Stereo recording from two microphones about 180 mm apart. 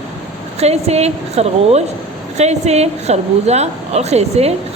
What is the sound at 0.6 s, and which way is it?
A woman's voice, 35° right (ahead or behind).